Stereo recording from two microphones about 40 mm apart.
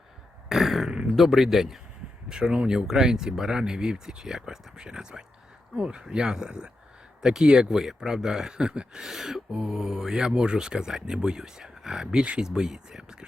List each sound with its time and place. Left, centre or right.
0.4 s a sound: centre
1.1 s speech: centre
12.2 s speech: right
12.5 s speech: centre